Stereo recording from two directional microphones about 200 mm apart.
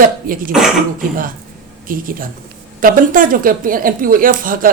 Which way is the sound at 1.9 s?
45° right (ahead or behind).